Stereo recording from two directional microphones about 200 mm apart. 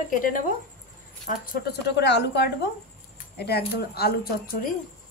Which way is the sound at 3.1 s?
55° left (ahead or behind).